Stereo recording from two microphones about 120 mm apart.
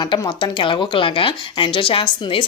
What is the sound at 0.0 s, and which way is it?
Speech, 40° left (ahead or behind).